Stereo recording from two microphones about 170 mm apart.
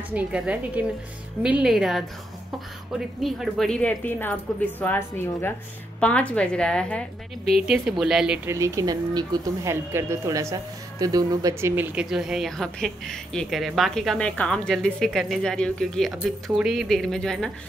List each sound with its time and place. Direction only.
0.1 s a woman's voice: 10° right (ahead or behind)
3.2 s speech: centre (ahead or behind)
8.5 s speech: 20° right (ahead or behind)
11.7 s speech: 10° right (ahead or behind)